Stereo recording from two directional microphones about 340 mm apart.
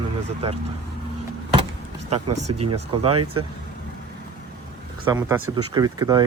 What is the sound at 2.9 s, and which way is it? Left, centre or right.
Speech, centre.